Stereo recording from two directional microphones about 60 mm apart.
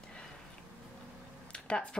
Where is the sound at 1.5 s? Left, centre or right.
Centre.